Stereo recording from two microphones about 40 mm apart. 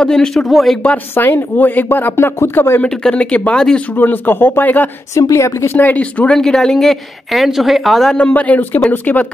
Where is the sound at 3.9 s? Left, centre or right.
Left.